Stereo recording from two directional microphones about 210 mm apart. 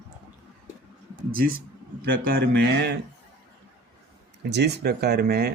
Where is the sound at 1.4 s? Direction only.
45° right (ahead or behind).